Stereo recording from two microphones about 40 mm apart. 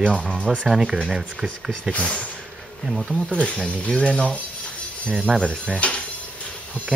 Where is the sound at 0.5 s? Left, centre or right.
Centre.